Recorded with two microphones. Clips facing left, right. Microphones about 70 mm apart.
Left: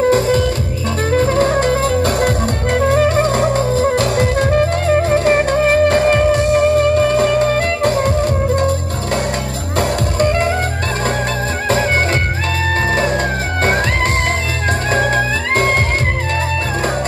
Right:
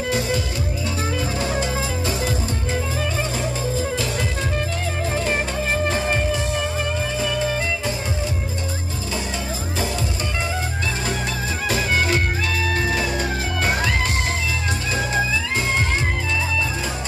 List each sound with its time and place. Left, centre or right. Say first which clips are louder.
0.1 s music: left 10 dB; left
9.8 s music: left 11 dB; left
14.9 s music: left 6 dB; left